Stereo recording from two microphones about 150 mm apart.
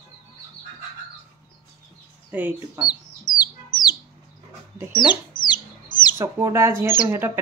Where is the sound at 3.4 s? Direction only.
30° left (ahead or behind).